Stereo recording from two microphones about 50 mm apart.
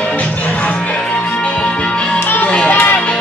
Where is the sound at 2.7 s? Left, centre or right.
Left.